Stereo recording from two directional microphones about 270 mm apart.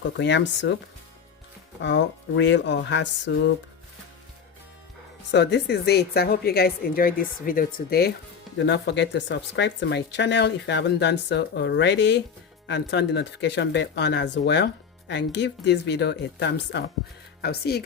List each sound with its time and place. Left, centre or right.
0.2 s speech: left
1.8 s speech: left
5.3 s speech: left